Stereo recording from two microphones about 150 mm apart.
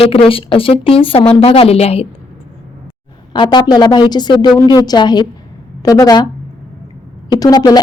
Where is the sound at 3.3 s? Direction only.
35° left (ahead or behind).